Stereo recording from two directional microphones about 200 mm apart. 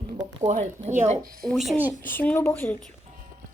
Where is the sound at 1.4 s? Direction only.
Centre (ahead or behind).